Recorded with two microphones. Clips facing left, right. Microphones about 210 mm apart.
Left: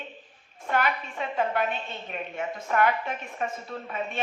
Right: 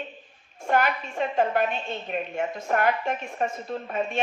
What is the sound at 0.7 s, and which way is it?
A woman's voice, 45° right (ahead or behind).